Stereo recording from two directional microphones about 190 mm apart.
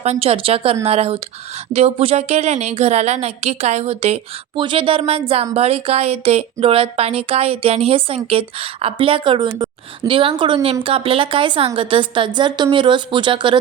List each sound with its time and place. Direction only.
0.0 s a woman's voice: 35° right (ahead or behind)